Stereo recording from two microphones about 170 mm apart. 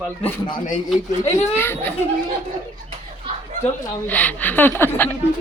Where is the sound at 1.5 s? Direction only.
15° left (ahead or behind).